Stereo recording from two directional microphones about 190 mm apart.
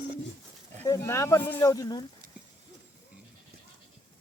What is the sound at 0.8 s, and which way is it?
Speech, 15° left (ahead or behind).